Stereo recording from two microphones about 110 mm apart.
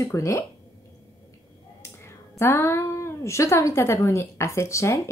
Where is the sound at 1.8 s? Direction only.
25° left (ahead or behind).